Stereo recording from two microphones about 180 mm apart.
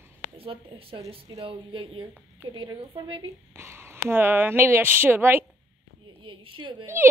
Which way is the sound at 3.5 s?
15° right (ahead or behind).